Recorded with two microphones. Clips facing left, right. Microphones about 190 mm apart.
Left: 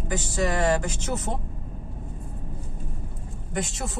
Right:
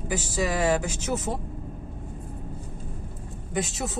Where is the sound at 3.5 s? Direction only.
Centre (ahead or behind).